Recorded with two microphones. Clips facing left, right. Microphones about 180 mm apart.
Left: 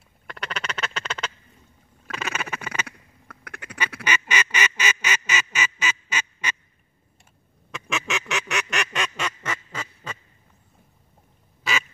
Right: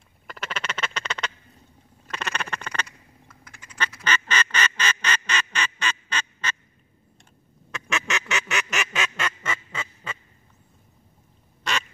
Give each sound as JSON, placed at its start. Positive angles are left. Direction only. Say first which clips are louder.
{"t": 0.3, "sound": "duck", "louder": "even", "side_deg": 0}
{"t": 3.3, "sound": "duck", "louder": "left 12 dB", "side_deg": 65}
{"t": 4.0, "sound": "quack", "louder": "even", "side_deg": 10}
{"t": 7.7, "sound": "quack", "louder": "even", "side_deg": 0}
{"t": 11.7, "sound": "quack", "louder": "left 1 dB", "side_deg": 0}